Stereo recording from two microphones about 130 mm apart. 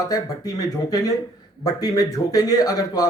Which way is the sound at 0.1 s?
30° left (ahead or behind).